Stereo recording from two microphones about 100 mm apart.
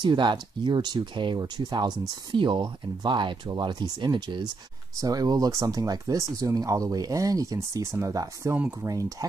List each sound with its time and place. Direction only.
0.0 s speech: 50° right (ahead or behind); by 9.0 s 25° right (ahead or behind)